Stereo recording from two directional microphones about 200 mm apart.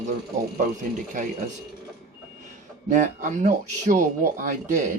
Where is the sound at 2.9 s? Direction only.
40° right (ahead or behind).